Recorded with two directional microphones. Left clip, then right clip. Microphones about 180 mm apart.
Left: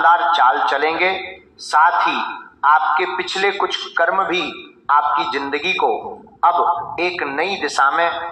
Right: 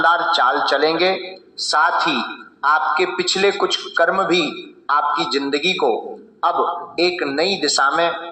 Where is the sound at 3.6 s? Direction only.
30° right (ahead or behind).